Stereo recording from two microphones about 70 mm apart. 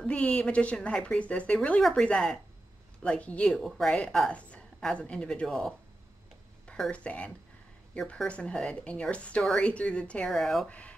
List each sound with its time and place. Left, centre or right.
0.0 s speech: centre
1.8 s a woman's voice: centre
3.4 s a woman's voice: centre
4.3 s a sound: centre
4.9 s speech: centre
6.7 s speech: centre
10.3 s a woman's voice: centre
10.7 s speech: centre